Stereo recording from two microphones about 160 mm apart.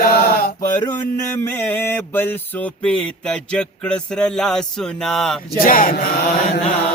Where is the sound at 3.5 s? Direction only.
5° left (ahead or behind).